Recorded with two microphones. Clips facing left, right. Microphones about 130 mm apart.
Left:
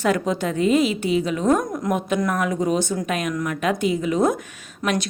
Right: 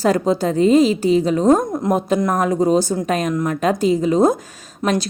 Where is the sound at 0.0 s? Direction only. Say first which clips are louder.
Right 5 dB; 35° right (ahead or behind).